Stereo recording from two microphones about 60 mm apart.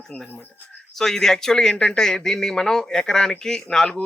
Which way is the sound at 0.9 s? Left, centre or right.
Centre.